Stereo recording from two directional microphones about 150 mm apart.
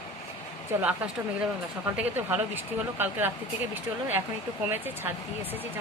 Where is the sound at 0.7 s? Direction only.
15° right (ahead or behind).